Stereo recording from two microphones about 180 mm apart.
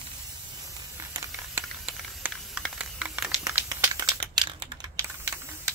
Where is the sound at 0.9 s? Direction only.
15° right (ahead or behind).